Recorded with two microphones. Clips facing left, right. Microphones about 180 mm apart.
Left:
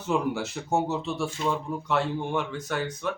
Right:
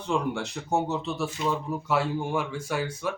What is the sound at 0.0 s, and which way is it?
Speech, 5° left (ahead or behind).